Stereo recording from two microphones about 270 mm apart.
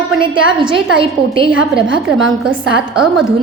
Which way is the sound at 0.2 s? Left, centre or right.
Centre.